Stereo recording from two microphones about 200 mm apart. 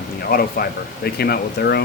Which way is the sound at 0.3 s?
45° left (ahead or behind).